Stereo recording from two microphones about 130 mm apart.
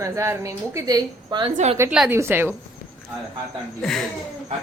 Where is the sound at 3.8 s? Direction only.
5° left (ahead or behind).